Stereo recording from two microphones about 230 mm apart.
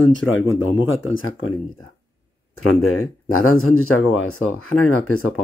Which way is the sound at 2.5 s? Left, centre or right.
Left.